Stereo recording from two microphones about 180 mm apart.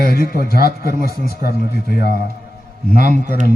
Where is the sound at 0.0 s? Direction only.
55° left (ahead or behind).